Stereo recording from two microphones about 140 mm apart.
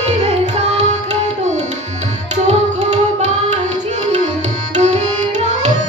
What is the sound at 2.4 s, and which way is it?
Music, 55° right (ahead or behind).